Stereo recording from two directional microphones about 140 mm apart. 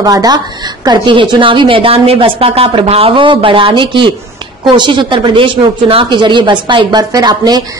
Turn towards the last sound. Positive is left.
turn(degrees=-30)  # may be behind; listen again after turning